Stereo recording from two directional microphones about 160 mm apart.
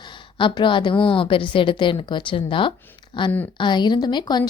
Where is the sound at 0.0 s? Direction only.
30° left (ahead or behind).